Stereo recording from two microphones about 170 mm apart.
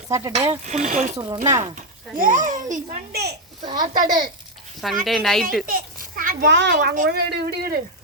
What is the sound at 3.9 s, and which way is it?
Speech, 50° right (ahead or behind).